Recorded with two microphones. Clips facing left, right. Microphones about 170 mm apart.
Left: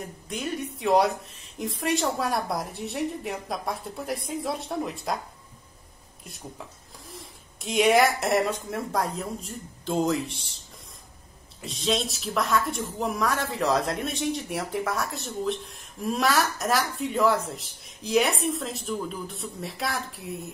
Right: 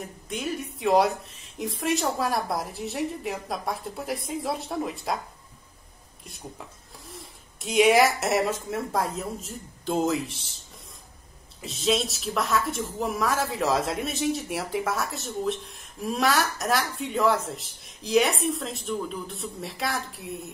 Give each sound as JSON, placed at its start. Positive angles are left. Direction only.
{"t": 0.0, "sound": "a woman's voice", "side_deg": 0}
{"t": 7.1, "sound": "speech", "side_deg": 0}
{"t": 11.6, "sound": "a woman's voice", "side_deg": 0}